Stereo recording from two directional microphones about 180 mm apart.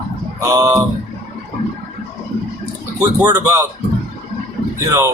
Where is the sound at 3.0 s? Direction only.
20° right (ahead or behind).